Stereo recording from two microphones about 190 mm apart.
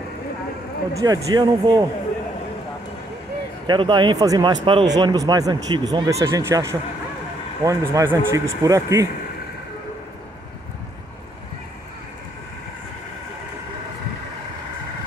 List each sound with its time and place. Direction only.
0.9 s speech: 20° right (ahead or behind)
3.6 s a man's voice: 25° right (ahead or behind)